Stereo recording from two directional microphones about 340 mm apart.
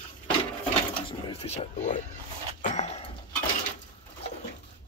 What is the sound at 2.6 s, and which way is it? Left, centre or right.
Dog, centre.